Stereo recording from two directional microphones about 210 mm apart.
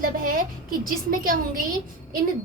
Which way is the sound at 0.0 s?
40° right (ahead or behind).